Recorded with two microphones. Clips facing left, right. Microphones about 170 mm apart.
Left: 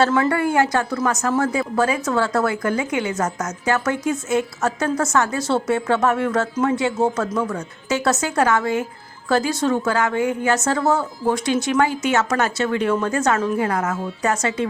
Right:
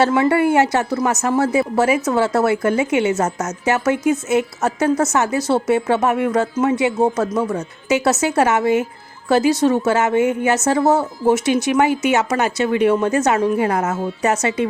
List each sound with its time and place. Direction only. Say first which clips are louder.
0.2 s speech: right 4 dB; 25° right (ahead or behind)